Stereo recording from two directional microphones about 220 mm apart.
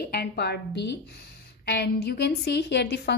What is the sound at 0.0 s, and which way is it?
A woman's voice, 45° left (ahead or behind).